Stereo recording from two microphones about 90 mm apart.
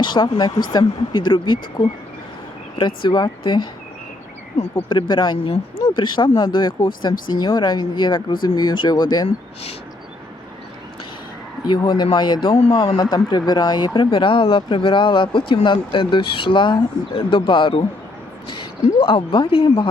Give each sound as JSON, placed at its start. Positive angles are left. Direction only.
{"t": 0.0, "sound": "speech", "side_deg": 60}
{"t": 4.9, "sound": "speech", "side_deg": 60}
{"t": 5.8, "sound": "speech", "side_deg": 60}
{"t": 12.0, "sound": "speech", "side_deg": 60}
{"t": 12.8, "sound": "speech", "side_deg": 50}